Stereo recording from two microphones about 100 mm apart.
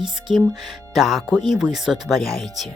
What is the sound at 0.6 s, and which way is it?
Speech, centre (ahead or behind).